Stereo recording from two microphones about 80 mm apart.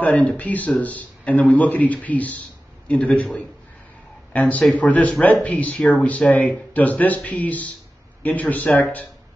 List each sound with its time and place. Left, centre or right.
0.0 s a man's voice: centre
4.3 s speech: centre